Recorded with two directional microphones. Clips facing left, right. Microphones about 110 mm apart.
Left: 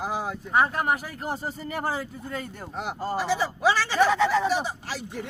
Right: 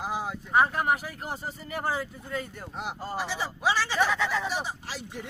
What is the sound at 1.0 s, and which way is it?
Speech, 35° left (ahead or behind).